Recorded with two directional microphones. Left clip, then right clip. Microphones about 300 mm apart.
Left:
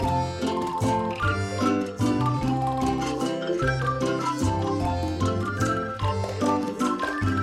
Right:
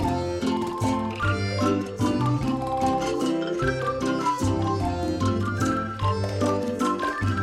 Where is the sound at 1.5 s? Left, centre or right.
Centre.